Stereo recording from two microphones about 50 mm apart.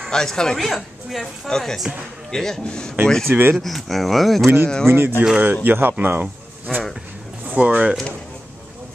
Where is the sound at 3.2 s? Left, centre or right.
Right.